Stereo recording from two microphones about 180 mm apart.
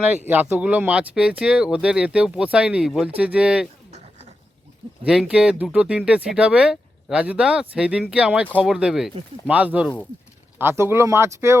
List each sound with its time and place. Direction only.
0.3 s speech: 10° right (ahead or behind)
5.0 s speech: 5° right (ahead or behind)